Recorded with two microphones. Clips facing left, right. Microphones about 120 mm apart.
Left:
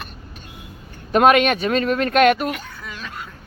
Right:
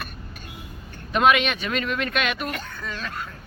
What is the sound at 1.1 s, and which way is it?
Speech, 45° left (ahead or behind).